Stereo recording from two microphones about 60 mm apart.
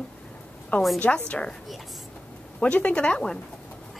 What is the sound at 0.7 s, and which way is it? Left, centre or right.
Speech, left.